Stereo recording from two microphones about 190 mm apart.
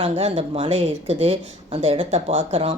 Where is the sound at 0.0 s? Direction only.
30° right (ahead or behind).